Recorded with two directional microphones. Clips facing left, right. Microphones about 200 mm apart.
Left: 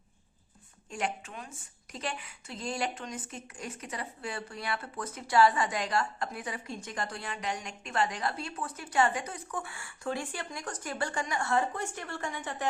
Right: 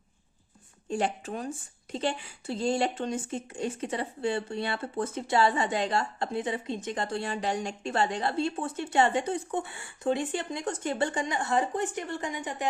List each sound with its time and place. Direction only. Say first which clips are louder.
0.9 s speech: right 6 dB; 30° right (ahead or behind)